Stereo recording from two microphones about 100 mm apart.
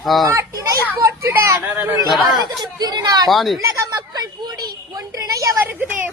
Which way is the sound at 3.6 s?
35° right (ahead or behind).